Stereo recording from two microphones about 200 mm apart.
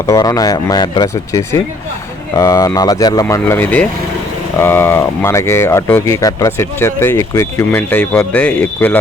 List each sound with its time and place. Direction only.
0.0 s speech: 15° left (ahead or behind)